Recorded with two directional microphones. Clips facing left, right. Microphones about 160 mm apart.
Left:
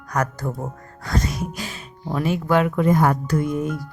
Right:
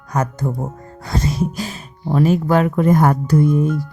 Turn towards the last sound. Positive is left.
turn(degrees=-30)  # may be behind; listen again after turning